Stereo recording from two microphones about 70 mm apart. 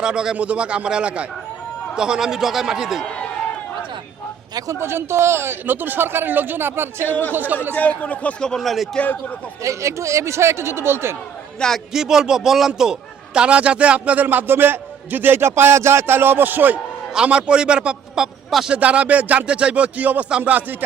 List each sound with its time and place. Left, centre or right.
0.0 s a man's voice: centre
4.7 s speech: right
7.1 s a man's voice: left
7.3 s a man's voice: right
7.7 s a man's voice: left; by 8.9 s centre
9.0 s a man's voice: left
9.6 s speech: right
11.6 s a man's voice: centre
11.9 s a man's voice: centre; by 16.8 s right
17.2 s a man's voice: centre
18.8 s a man's voice: centre